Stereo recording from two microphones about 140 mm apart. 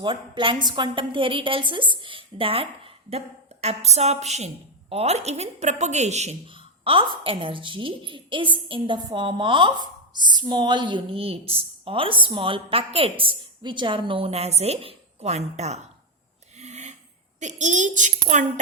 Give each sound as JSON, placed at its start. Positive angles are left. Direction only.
{"t": 0.0, "sound": "a woman's voice", "side_deg": -35}
{"t": 6.5, "sound": "a woman's voice", "side_deg": -40}
{"t": 16.6, "sound": "a sound", "side_deg": -55}
{"t": 17.4, "sound": "a woman's voice", "side_deg": -60}